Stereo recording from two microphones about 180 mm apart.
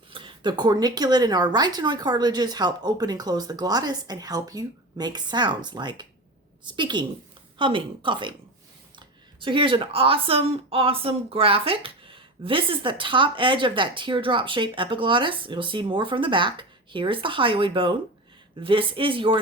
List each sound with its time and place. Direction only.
0.1 s speech: 25° right (ahead or behind)